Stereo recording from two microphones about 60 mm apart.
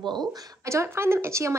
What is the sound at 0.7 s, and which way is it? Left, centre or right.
Speech, right.